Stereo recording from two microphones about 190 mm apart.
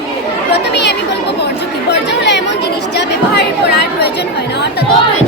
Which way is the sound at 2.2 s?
65° left (ahead or behind).